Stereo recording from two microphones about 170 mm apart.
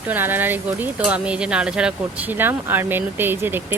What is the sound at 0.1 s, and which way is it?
Speech, 10° right (ahead or behind).